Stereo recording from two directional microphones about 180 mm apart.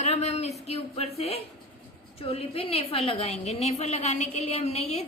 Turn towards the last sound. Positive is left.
turn(degrees=35)  # may be behind; listen again after turning